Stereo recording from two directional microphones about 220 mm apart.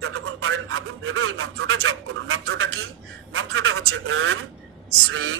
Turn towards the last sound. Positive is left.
turn(degrees=-65)  # may be behind; listen again after turning